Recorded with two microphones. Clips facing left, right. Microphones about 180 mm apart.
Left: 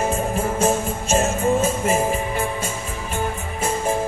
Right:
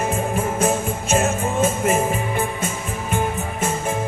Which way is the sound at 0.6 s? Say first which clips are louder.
Even; 30° left (ahead or behind).